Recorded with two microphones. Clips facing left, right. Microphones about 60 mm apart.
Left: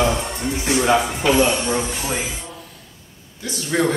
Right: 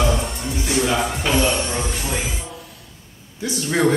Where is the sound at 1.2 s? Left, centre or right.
Centre.